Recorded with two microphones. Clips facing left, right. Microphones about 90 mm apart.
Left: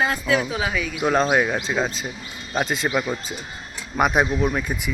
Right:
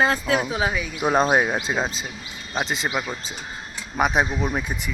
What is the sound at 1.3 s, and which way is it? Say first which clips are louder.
Speech: even; 20° right (ahead or behind).